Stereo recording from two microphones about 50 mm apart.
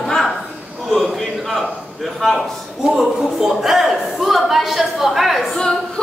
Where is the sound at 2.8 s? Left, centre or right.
Centre.